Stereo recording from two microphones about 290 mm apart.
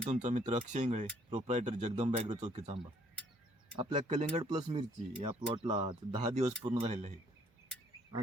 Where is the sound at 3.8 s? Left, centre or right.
Right.